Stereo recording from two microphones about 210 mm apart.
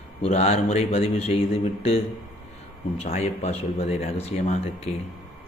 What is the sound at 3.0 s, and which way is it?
A man's voice, 30° left (ahead or behind).